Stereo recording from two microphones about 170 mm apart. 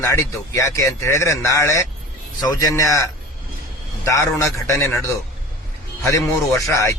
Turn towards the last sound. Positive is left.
turn(degrees=15)  # may be behind; listen again after turning